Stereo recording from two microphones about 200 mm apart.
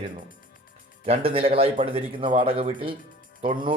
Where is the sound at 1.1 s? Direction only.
30° right (ahead or behind).